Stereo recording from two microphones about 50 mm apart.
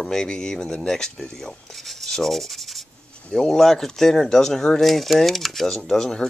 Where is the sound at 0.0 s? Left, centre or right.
Centre.